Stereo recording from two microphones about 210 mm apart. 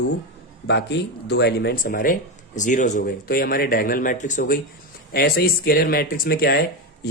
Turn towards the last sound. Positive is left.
turn(degrees=50)  # may be behind; listen again after turning